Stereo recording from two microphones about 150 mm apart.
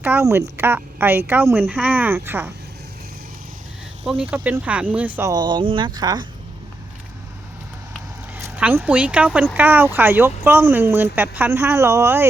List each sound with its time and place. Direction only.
0.0 s speech: 15° right (ahead or behind)
4.0 s speech: 10° right (ahead or behind)
5.3 s speech: 30° right (ahead or behind)
8.5 s speech: 10° right (ahead or behind)